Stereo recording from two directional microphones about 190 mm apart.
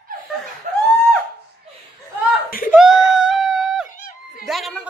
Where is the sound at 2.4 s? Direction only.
50° left (ahead or behind).